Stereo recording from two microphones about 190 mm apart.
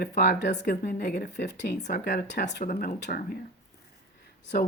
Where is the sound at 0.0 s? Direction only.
55° left (ahead or behind).